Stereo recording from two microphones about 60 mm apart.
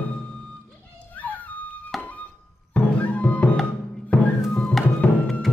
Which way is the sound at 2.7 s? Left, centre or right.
Left.